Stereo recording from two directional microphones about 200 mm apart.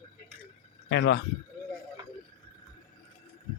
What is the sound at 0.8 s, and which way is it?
Speech, 60° left (ahead or behind).